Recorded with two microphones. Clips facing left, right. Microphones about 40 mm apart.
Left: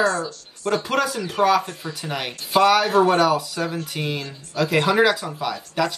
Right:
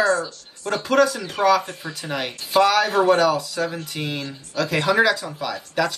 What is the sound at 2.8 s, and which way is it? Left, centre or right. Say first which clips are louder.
Speech: left 2 dB; left.